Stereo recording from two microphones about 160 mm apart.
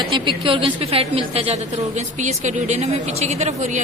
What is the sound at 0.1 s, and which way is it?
A woman's voice, 35° right (ahead or behind).